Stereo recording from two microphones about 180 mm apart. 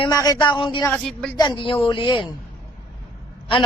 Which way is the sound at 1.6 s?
30° left (ahead or behind).